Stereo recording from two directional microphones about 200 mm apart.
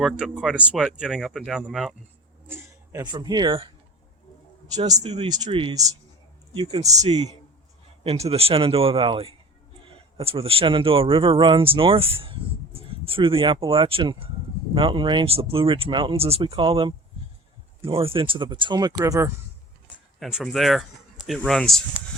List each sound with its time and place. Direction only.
0.0 s speech: 5° right (ahead or behind)
2.5 s speech: 20° right (ahead or behind)
4.8 s speech: 35° right (ahead or behind); by 19.3 s 15° right (ahead or behind)
20.1 s speech: centre (ahead or behind)